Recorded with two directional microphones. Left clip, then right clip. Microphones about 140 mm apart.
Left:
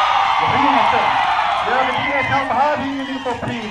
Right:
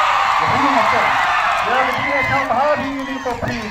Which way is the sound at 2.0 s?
75° right (ahead or behind).